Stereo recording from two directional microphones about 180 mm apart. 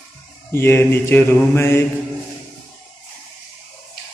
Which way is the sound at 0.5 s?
15° left (ahead or behind).